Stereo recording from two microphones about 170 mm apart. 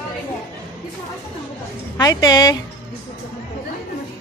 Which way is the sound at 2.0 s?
20° left (ahead or behind).